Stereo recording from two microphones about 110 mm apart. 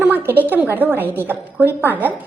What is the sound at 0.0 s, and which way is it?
A woman's voice, 20° right (ahead or behind).